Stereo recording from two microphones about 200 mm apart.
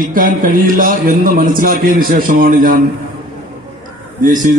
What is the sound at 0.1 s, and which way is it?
A man's voice, 45° right (ahead or behind).